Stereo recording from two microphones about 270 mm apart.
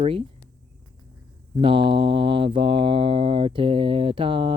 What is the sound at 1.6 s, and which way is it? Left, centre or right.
Mantra, centre.